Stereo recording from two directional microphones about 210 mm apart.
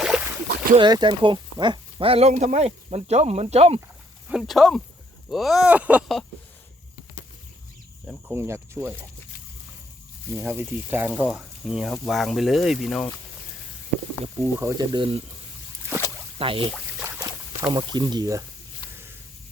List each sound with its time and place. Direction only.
0.1 s a sound: centre (ahead or behind)
0.8 s speech: 20° right (ahead or behind)
4.3 s speech: centre (ahead or behind)
8.0 s speech: 10° right (ahead or behind)
10.2 s speech: 10° right (ahead or behind); by 13.1 s 5° left (ahead or behind)
14.4 s speech: 15° right (ahead or behind)
16.4 s speech: 25° right (ahead or behind)
17.0 s boat: 10° right (ahead or behind)
17.7 s speech: 20° right (ahead or behind)
18.8 s a sound: 25° left (ahead or behind)